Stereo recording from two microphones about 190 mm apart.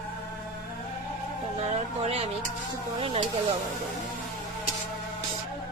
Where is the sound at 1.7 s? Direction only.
30° right (ahead or behind).